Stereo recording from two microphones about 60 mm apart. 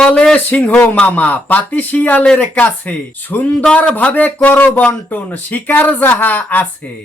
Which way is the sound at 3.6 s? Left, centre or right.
Centre.